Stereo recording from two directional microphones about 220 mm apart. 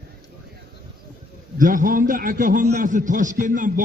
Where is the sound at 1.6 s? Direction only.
40° right (ahead or behind).